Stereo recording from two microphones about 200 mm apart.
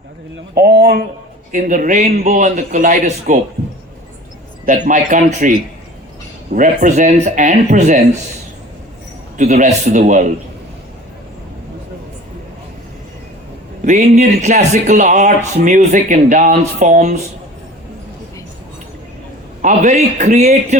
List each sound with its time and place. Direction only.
0.5 s speech: 50° right (ahead or behind)
1.5 s a man's voice: 40° right (ahead or behind)
4.6 s a man's voice: 40° right (ahead or behind)
9.4 s a man's voice: 35° right (ahead or behind)
13.8 s a man's voice: 35° right (ahead or behind)
19.6 s a man's voice: 40° right (ahead or behind)